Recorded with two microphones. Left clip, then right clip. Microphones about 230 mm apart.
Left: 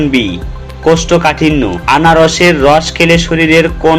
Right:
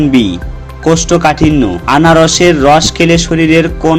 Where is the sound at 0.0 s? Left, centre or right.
Right.